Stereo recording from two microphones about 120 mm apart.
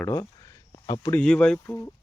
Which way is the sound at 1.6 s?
25° left (ahead or behind).